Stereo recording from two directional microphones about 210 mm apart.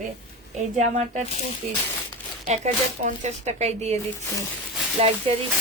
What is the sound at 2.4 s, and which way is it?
Speech, 35° right (ahead or behind).